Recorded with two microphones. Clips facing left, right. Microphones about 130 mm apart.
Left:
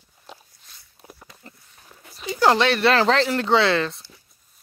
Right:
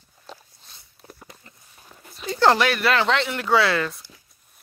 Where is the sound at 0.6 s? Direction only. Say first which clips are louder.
Right 2 dB; 25° right (ahead or behind).